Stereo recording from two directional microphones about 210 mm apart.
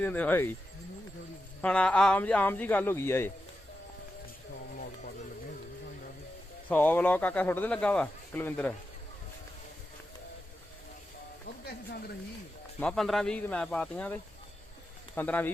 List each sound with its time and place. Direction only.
0.0 s speech: 10° left (ahead or behind)
1.6 s speech: 5° left (ahead or behind)
6.7 s speech: 10° left (ahead or behind)
11.6 s speech: 50° left (ahead or behind)
12.8 s speech: centre (ahead or behind)